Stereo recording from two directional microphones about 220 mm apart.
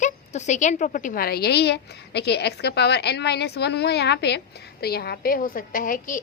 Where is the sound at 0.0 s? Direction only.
35° left (ahead or behind).